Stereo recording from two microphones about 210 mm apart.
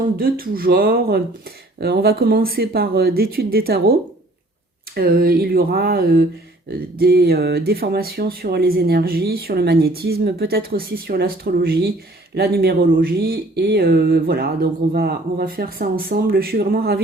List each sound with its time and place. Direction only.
0.2 s speech: 45° right (ahead or behind)
4.9 s speech: 45° right (ahead or behind)